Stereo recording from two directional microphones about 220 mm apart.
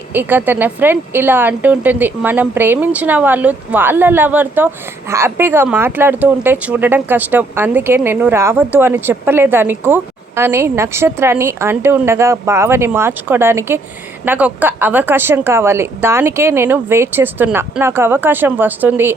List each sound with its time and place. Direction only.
0.1 s a woman's voice: 10° right (ahead or behind)